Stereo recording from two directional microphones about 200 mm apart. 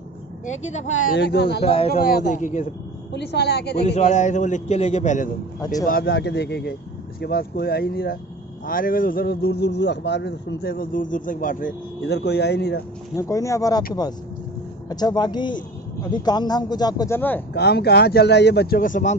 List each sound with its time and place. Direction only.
0.5 s a man's voice: 35° left (ahead or behind)
1.1 s speech: 55° left (ahead or behind)
1.6 s a man's voice: 30° left (ahead or behind)
1.9 s a man's voice: 45° left (ahead or behind)
3.1 s speech: 60° left (ahead or behind)
3.8 s a man's voice: 35° left (ahead or behind)
5.9 s a man's voice: 50° left (ahead or behind)
12.0 s speech: 55° left (ahead or behind)
13.1 s speech: 15° left (ahead or behind)
14.9 s a man's voice: 20° left (ahead or behind)
17.6 s a man's voice: 55° left (ahead or behind)